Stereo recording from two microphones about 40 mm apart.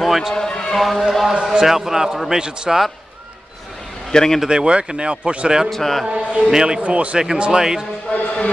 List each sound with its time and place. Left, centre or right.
0.0 s a man's voice: centre
0.3 s a man's voice: centre
0.7 s speech: centre
1.5 s speech: centre
4.1 s speech: centre
4.5 s speech: right
5.7 s speech: centre
6.0 s speech: right
6.8 s speech: right
8.1 s a man's voice: left